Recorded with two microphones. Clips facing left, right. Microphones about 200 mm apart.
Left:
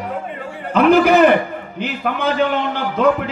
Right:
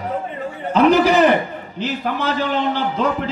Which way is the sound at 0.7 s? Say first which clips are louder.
Left 2 dB; 55° left (ahead or behind).